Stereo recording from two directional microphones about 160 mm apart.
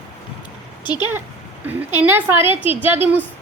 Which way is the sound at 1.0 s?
15° right (ahead or behind).